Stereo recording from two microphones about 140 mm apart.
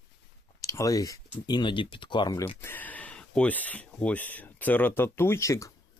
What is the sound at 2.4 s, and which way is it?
Speech, 15° left (ahead or behind).